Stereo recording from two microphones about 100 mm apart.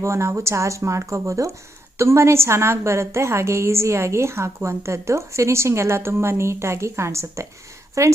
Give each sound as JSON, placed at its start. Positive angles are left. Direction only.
{"t": 0.0, "sound": "a woman's voice", "side_deg": -30}